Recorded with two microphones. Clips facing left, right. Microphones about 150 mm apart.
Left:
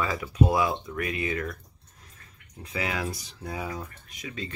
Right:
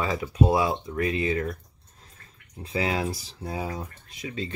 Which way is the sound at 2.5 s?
30° right (ahead or behind).